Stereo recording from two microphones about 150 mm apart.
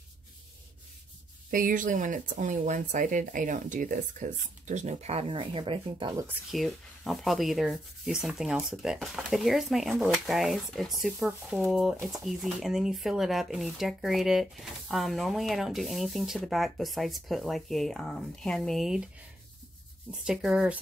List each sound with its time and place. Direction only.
1.5 s speech: 65° right (ahead or behind); by 6.1 s 35° right (ahead or behind)
6.5 s speech: centre (ahead or behind)
20.1 s speech: 5° right (ahead or behind)